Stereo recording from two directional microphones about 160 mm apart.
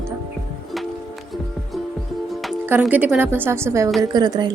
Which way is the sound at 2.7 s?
10° right (ahead or behind).